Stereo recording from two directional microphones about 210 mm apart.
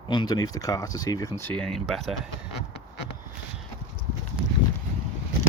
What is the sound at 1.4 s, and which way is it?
Speech, 5° left (ahead or behind).